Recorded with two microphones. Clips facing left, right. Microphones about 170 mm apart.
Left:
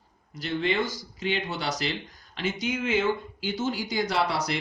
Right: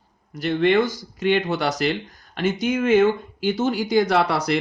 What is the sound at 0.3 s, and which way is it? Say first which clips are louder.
Speech: right 9 dB; 60° right (ahead or behind).